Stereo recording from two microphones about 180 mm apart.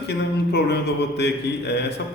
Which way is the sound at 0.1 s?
65° left (ahead or behind).